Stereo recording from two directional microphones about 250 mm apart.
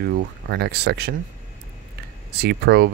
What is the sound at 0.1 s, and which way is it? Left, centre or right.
Speech, right.